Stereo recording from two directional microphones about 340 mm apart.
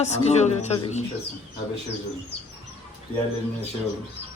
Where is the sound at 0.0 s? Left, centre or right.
Centre.